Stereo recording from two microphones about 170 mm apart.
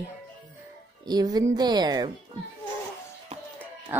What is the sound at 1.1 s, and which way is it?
Speech, 25° right (ahead or behind).